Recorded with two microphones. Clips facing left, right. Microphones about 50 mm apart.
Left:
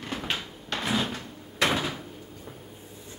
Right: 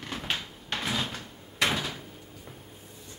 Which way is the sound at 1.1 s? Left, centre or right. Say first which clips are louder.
Left 3 dB; left.